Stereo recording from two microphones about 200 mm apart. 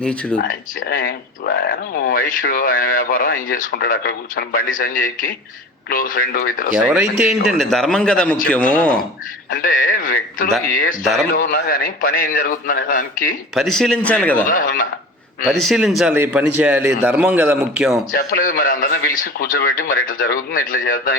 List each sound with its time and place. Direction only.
0.0 s a man's voice: 5° left (ahead or behind)
0.3 s speech: 45° left (ahead or behind)
6.9 s a man's voice: 5° right (ahead or behind)
9.5 s speech: 45° left (ahead or behind)
11.0 s a man's voice: centre (ahead or behind)
11.3 s speech: 45° left (ahead or behind)
13.5 s a man's voice: centre (ahead or behind)
14.4 s speech: 45° left (ahead or behind)
15.4 s a man's voice: centre (ahead or behind)
18.1 s speech: 45° left (ahead or behind)